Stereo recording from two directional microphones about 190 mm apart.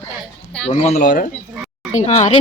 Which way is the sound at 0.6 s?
35° left (ahead or behind).